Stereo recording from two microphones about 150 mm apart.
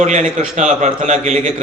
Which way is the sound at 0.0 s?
55° right (ahead or behind).